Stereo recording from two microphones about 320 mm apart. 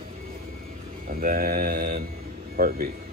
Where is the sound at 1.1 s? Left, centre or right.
Right.